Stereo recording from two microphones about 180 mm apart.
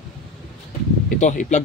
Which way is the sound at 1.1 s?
45° left (ahead or behind).